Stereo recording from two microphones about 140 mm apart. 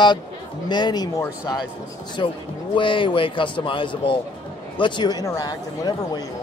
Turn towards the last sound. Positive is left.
turn(degrees=30)  # may be behind; listen again after turning